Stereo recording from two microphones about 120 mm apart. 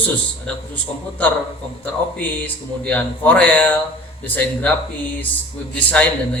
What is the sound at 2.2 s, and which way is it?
Speech, 15° left (ahead or behind).